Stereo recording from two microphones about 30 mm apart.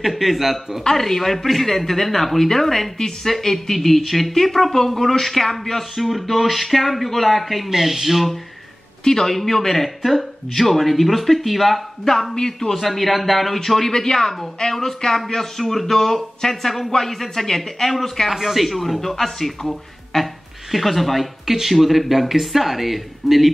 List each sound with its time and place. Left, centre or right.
0.1 s speech: centre
0.8 s speech: centre
9.0 s a man's voice: centre
12.7 s speech: centre